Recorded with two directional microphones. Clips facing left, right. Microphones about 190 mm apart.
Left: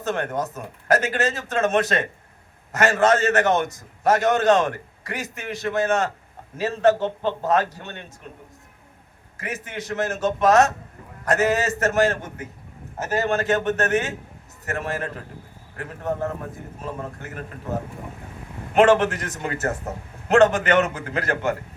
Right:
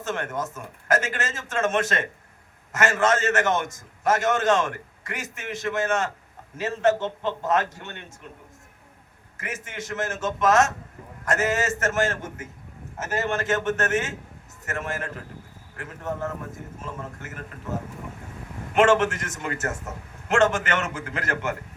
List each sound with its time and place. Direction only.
0.0 s a man's voice: 35° left (ahead or behind)
9.4 s a man's voice: 35° left (ahead or behind)